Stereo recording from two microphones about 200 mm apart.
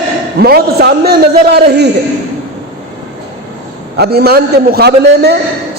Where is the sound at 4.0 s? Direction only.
50° right (ahead or behind).